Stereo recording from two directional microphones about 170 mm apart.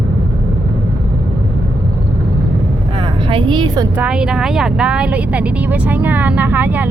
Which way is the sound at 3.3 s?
30° right (ahead or behind).